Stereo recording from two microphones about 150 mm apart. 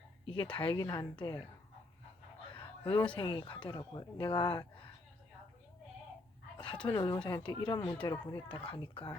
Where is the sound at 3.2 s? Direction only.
35° left (ahead or behind).